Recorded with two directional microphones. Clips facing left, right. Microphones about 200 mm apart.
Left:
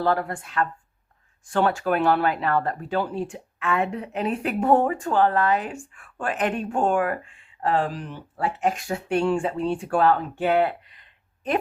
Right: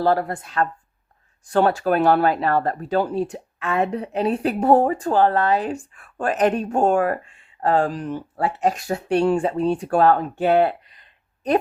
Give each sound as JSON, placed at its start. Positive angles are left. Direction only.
{"t": 0.0, "sound": "speech", "side_deg": -35}